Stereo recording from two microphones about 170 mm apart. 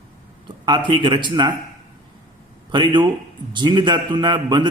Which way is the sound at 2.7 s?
25° right (ahead or behind).